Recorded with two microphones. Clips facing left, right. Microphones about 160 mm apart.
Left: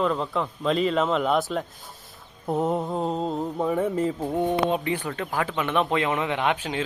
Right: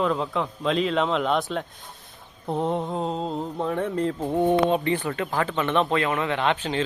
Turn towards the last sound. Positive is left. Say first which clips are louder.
# right 1 dB
turn(degrees=10)  # may be behind; listen again after turning